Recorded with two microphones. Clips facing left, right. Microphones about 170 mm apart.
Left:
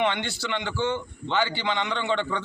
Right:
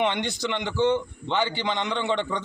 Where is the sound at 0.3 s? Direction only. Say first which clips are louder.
Right 2 dB; 15° right (ahead or behind).